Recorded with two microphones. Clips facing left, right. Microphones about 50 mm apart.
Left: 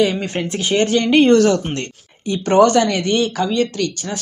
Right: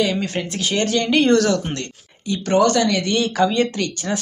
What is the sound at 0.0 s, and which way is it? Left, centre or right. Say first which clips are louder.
Speech: left 3 dB; centre.